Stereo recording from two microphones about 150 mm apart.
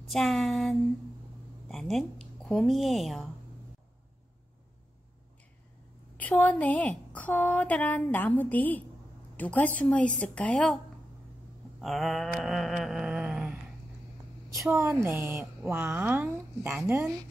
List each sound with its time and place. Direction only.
0.1 s a sound: centre (ahead or behind)
1.7 s speech: centre (ahead or behind)
6.1 s speech: 10° left (ahead or behind)
11.8 s mantra: centre (ahead or behind)
14.7 s speech: 20° right (ahead or behind)